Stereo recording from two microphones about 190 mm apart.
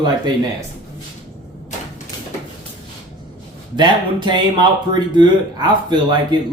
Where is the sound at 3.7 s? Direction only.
25° right (ahead or behind).